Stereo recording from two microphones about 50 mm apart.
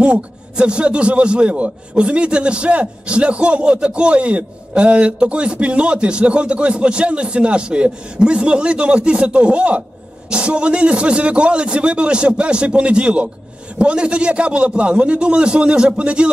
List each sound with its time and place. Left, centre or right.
0.0 s a man's voice: right